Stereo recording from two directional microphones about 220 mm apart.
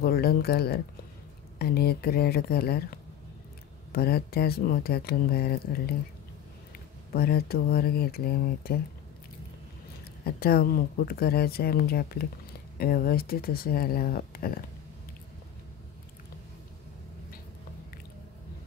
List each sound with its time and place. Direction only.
0.0 s speech: 45° left (ahead or behind)
7.1 s speech: 45° left (ahead or behind)
10.2 s speech: 45° left (ahead or behind)